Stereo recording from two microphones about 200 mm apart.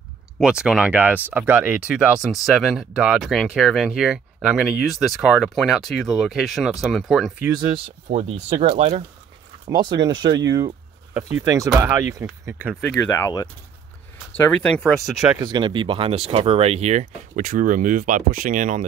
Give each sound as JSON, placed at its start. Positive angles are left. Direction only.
{"t": 0.4, "sound": "speech", "side_deg": -5}
{"t": 7.4, "sound": "speech", "side_deg": -20}
{"t": 9.7, "sound": "speech", "side_deg": -20}
{"t": 13.1, "sound": "speech", "side_deg": 15}
{"t": 15.3, "sound": "speech", "side_deg": -20}